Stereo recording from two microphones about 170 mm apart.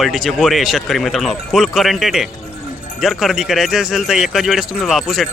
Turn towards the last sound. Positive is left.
turn(degrees=0)  # may be behind; listen again after turning